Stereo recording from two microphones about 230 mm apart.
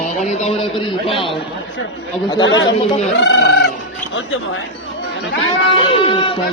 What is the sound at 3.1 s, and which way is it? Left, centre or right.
Speech, left.